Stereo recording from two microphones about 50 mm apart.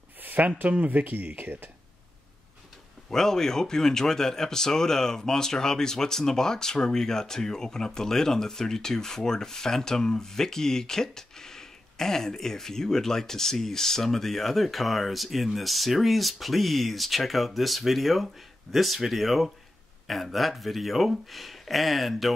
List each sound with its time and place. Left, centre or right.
0.2 s a sound: right
0.6 s speech: right
3.1 s speech: centre